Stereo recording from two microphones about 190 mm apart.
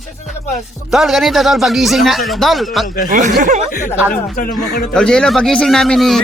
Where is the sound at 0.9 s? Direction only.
Centre (ahead or behind).